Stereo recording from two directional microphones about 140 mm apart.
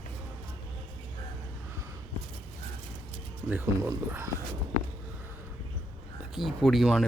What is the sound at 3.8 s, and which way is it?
Speech, 20° right (ahead or behind).